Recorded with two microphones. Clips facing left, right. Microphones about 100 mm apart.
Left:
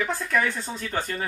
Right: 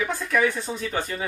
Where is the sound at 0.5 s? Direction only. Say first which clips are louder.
Right 2 dB; 5° right (ahead or behind).